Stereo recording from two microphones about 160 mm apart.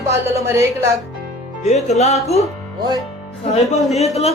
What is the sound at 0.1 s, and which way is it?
Speech, 15° right (ahead or behind).